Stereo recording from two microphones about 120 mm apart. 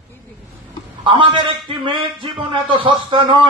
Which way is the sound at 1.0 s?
45° right (ahead or behind).